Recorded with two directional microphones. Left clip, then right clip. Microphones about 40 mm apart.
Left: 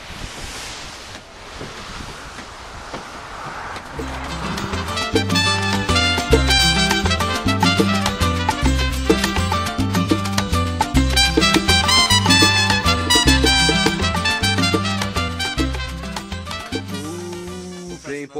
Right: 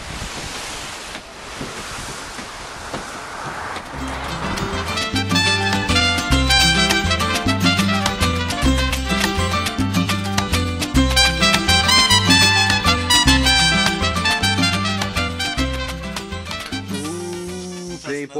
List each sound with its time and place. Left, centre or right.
4.3 s music: centre
4.7 s salsa music: left